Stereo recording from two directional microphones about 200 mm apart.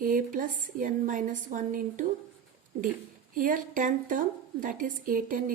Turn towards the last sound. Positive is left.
turn(degrees=-45)  # may be behind; listen again after turning